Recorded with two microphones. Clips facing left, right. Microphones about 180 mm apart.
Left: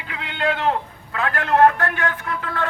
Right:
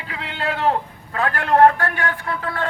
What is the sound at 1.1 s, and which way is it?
Speech, 35° right (ahead or behind).